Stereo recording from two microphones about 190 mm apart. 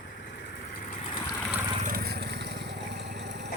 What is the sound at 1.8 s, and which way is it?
Vehicle, 50° right (ahead or behind).